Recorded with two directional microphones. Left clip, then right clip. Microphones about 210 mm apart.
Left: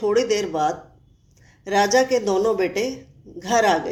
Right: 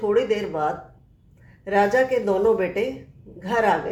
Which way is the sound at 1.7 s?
30° left (ahead or behind).